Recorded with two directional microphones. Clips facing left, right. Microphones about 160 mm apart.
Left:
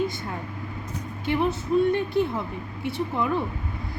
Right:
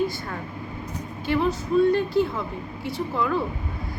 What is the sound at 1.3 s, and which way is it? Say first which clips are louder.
Speech: right 1 dB; 20° left (ahead or behind).